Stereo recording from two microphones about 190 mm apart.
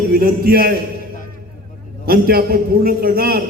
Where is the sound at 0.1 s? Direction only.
50° right (ahead or behind).